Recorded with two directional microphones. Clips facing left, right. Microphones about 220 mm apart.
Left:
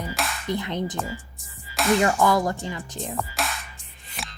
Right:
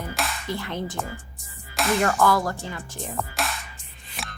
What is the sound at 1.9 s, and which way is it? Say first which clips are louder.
Speech: left 1 dB; 15° left (ahead or behind).